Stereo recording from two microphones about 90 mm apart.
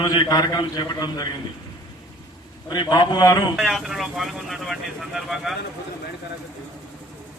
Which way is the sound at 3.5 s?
5° right (ahead or behind).